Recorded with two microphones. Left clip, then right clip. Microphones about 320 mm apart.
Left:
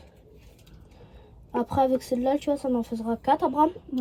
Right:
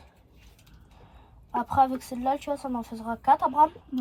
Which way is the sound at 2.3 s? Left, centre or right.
Centre.